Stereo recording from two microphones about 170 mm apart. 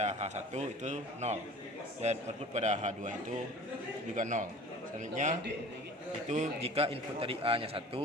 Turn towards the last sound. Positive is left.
turn(degrees=-30)  # may be behind; listen again after turning